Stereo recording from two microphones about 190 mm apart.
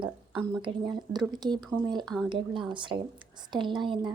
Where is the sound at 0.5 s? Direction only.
25° right (ahead or behind).